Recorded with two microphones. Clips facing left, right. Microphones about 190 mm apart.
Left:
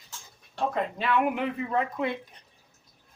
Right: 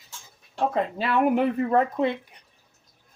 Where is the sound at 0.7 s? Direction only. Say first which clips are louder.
Right 1 dB; 35° right (ahead or behind).